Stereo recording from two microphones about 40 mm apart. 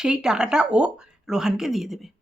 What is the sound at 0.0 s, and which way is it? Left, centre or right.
Speech, centre.